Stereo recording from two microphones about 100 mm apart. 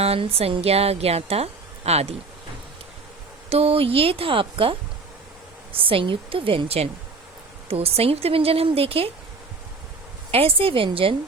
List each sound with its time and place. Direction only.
0.0 s a woman's voice: 75° right (ahead or behind)
3.5 s speech: 80° right; by 4.8 s 60° right (ahead or behind)
5.8 s a woman's voice: 60° right (ahead or behind)
10.3 s speech: 70° right (ahead or behind)